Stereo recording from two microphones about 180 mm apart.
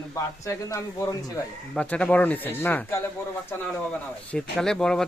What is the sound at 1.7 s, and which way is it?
Speech, 5° left (ahead or behind).